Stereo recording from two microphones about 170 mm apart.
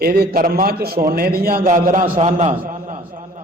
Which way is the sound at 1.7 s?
50° right (ahead or behind).